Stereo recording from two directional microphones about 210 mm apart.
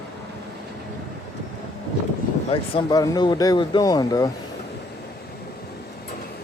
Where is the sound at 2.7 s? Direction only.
20° left (ahead or behind).